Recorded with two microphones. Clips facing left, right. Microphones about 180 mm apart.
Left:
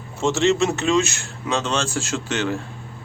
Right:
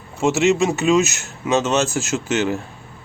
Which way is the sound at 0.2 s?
15° right (ahead or behind).